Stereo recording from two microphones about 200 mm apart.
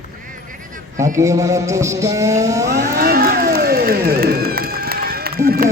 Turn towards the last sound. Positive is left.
turn(degrees=-50)  # may be behind; listen again after turning